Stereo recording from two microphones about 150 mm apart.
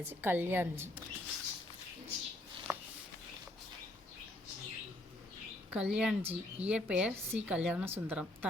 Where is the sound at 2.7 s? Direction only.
15° right (ahead or behind).